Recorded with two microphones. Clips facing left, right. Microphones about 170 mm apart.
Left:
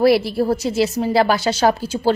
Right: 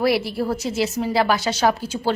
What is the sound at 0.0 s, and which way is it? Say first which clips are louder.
A woman's voice: left 5 dB; 35° left (ahead or behind).